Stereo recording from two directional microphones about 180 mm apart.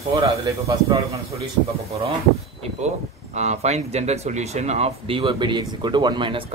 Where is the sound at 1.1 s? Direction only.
35° right (ahead or behind).